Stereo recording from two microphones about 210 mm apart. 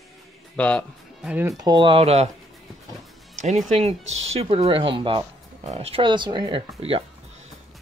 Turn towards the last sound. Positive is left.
turn(degrees=-30)  # may be behind; listen again after turning